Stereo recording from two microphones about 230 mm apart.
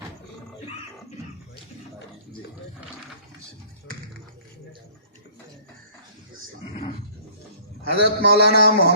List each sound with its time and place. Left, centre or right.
7.9 s a man's voice: left